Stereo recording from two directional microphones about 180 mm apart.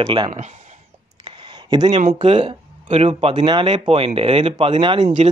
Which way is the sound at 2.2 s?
30° right (ahead or behind).